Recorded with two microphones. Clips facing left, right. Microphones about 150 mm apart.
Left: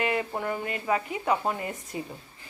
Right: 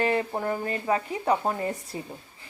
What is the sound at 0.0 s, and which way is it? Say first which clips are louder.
A child's voice: right 3 dB; 35° right (ahead or behind).